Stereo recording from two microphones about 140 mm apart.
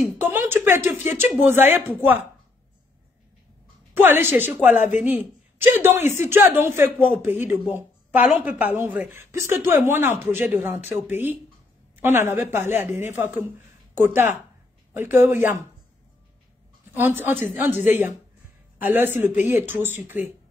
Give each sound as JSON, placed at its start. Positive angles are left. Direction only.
{"t": 0.2, "sound": "a woman's voice", "side_deg": -15}
{"t": 3.9, "sound": "a woman's voice", "side_deg": -15}
{"t": 16.9, "sound": "a woman's voice", "side_deg": -15}